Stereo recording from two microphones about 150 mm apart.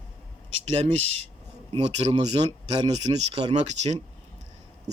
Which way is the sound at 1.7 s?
45° right (ahead or behind).